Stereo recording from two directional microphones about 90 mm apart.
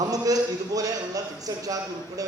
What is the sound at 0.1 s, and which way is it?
A man's voice, 40° right (ahead or behind).